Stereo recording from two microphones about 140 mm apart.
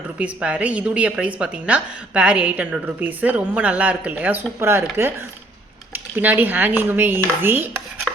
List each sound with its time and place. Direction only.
0.2 s a woman's voice: 10° right (ahead or behind)
6.1 s a woman's voice: 15° right (ahead or behind)
8.1 s rub: centre (ahead or behind)